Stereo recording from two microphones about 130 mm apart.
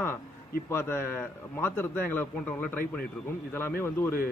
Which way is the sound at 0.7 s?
20° left (ahead or behind).